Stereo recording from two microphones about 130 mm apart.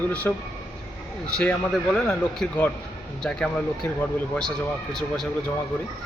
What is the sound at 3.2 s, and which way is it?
Speech, 10° left (ahead or behind).